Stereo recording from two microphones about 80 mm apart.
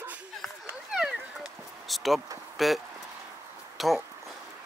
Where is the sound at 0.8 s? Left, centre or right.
Centre.